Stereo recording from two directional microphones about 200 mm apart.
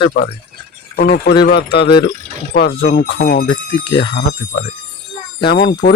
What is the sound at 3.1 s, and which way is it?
Speech, 45° left (ahead or behind).